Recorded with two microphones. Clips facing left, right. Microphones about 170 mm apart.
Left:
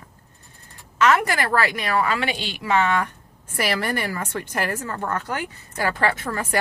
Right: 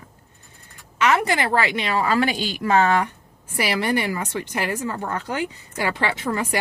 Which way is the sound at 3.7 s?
15° right (ahead or behind).